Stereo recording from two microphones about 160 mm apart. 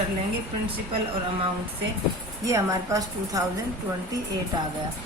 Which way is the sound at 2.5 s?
20° right (ahead or behind).